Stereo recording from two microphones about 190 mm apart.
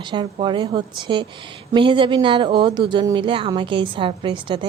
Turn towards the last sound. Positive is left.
turn(degrees=-25)  # may be behind; listen again after turning